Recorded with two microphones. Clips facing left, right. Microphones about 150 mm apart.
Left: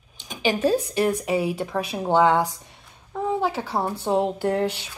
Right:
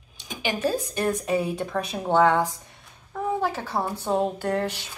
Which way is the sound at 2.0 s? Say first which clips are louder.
Left 1 dB; 20° left (ahead or behind).